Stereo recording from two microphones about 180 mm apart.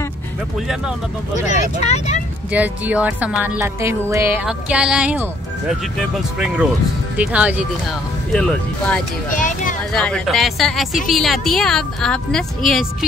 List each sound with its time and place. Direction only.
1.4 s speech: 40° left (ahead or behind)
2.5 s speech: 10° right (ahead or behind)
8.3 s a woman's voice: 5° left (ahead or behind)
9.4 s a sound: 45° left (ahead or behind)
9.9 s a woman's voice: 5° left (ahead or behind)